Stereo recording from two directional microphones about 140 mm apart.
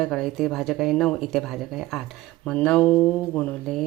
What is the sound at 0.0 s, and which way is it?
Speech, centre (ahead or behind).